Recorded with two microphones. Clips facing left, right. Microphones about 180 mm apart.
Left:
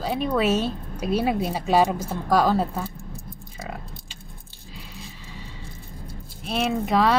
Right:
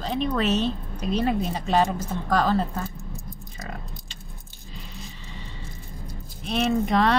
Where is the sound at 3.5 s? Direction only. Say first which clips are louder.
Left 3 dB; 10° left (ahead or behind).